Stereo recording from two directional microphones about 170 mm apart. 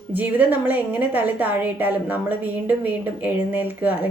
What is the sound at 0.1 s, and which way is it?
A woman's voice, 10° right (ahead or behind).